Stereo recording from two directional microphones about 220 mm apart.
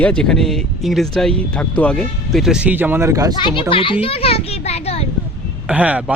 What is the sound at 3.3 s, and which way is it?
A child's voice, 20° left (ahead or behind).